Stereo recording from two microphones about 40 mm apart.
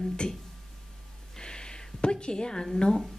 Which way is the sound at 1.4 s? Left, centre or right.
Left.